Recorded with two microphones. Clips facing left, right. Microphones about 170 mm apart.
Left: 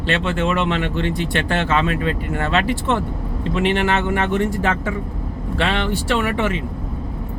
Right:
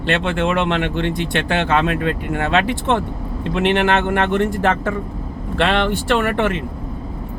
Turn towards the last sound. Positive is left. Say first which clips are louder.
# right 2 dB
turn(degrees=-55)  # may be behind; listen again after turning